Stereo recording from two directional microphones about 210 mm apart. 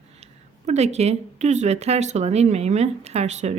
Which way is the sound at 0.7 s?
30° right (ahead or behind).